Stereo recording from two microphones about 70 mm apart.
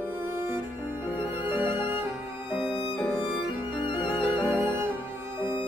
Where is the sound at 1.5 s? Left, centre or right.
Right.